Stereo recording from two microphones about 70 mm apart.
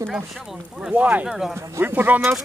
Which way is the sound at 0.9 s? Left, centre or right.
Right.